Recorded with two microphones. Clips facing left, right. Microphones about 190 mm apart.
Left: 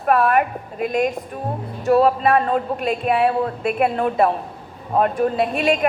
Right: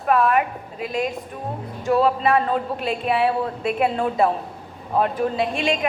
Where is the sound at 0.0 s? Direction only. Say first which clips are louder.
Left 2 dB; 55° left (ahead or behind).